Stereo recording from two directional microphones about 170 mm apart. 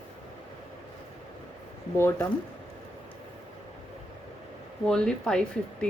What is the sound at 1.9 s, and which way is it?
Speech, 15° left (ahead or behind).